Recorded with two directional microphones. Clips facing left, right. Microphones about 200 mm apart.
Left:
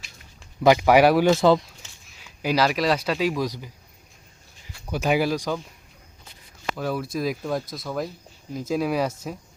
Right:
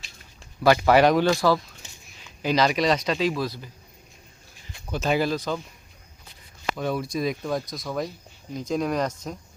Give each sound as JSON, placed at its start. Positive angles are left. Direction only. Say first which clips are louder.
{"t": 0.6, "sound": "speech", "louder": "left 2 dB", "side_deg": 15}
{"t": 1.3, "sound": "speech", "louder": "left 4 dB", "side_deg": 20}
{"t": 1.8, "sound": "a sound", "louder": "right 2 dB", "side_deg": -15}
{"t": 2.2, "sound": "speech", "louder": "even", "side_deg": 10}
{"t": 4.9, "sound": "speech", "louder": "left 1 dB", "side_deg": 10}
{"t": 6.7, "sound": "speech", "louder": "even", "side_deg": 5}